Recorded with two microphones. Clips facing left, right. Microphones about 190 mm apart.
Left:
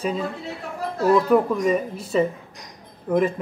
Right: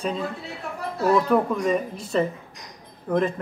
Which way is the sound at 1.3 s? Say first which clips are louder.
Left 3 dB; 5° left (ahead or behind).